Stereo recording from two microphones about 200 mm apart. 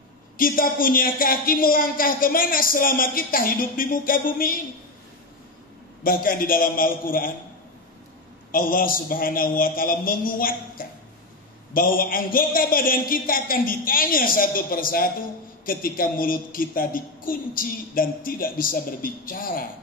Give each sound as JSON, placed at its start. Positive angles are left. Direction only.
{"t": 0.4, "sound": "a woman's voice", "side_deg": 45}
{"t": 6.0, "sound": "a woman's voice", "side_deg": 45}
{"t": 8.5, "sound": "a woman's voice", "side_deg": 45}